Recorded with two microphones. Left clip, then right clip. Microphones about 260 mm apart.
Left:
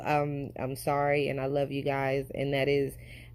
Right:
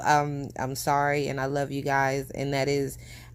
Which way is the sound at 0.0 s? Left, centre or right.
Right.